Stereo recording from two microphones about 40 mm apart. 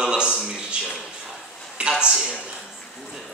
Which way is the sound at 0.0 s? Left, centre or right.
Right.